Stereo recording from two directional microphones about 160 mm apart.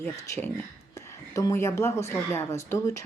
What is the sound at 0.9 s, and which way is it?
Speech, 20° left (ahead or behind).